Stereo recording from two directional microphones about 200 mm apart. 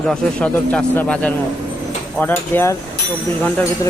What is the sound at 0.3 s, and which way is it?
Speech, 5° left (ahead or behind).